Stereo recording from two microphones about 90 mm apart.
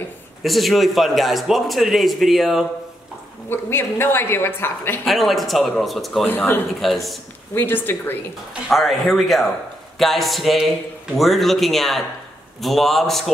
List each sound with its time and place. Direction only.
0.4 s a man's voice: centre (ahead or behind)
3.4 s a man's voice: 25° left (ahead or behind)
5.0 s a man's voice: centre (ahead or behind)
6.2 s a man's voice: 20° left (ahead or behind)
6.8 s a man's voice: centre (ahead or behind)
7.5 s a man's voice: 20° left (ahead or behind)
8.6 s a man's voice: centre (ahead or behind)